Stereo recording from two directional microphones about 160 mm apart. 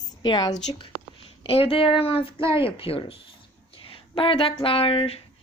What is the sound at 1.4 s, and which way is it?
A woman's voice, 35° left (ahead or behind).